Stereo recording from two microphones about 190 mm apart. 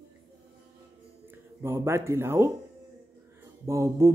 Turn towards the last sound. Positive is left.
turn(degrees=-15)  # may be behind; listen again after turning